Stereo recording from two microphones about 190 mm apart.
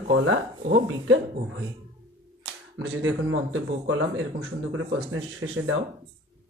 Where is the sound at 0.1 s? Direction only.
85° right.